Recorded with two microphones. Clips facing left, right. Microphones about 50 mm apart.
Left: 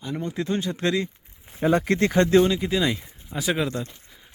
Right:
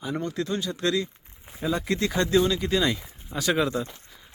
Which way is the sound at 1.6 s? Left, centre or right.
Left.